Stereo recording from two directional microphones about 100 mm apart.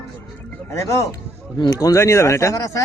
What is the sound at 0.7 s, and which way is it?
Speech, 30° left (ahead or behind).